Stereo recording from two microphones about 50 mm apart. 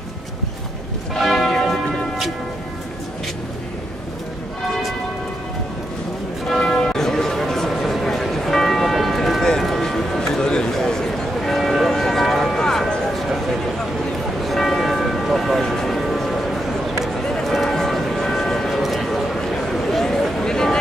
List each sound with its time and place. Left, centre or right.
1.1 s church bell: centre
6.7 s music: centre
7.8 s church bell: centre
10.4 s a sound: centre
14.4 s church bell: centre
17.6 s vehicle: centre
18.8 s a sound: centre